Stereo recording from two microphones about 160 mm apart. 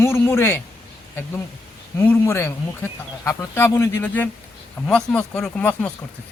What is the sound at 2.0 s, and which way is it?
Speech, 15° left (ahead or behind).